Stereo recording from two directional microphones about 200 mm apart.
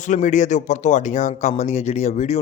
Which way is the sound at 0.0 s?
40° left (ahead or behind).